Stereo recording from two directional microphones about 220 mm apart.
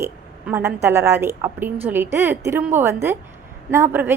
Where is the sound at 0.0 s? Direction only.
10° right (ahead or behind).